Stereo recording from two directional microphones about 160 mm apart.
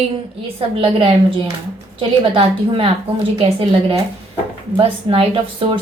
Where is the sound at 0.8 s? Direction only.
35° right (ahead or behind).